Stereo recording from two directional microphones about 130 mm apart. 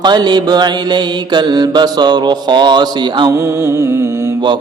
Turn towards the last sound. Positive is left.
turn(degrees=-20)  # may be behind; listen again after turning